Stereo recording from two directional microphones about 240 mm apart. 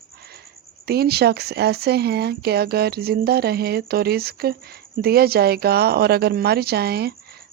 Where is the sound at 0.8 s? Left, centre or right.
Right.